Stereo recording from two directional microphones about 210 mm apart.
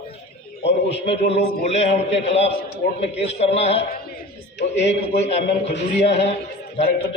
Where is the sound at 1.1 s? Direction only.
30° left (ahead or behind).